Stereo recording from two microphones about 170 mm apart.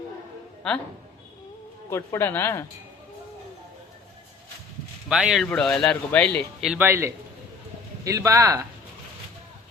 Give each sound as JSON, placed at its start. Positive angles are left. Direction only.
{"t": 0.6, "sound": "speech", "side_deg": 5}
{"t": 1.9, "sound": "speech", "side_deg": 15}
{"t": 5.0, "sound": "speech", "side_deg": -5}
{"t": 6.6, "sound": "speech", "side_deg": -10}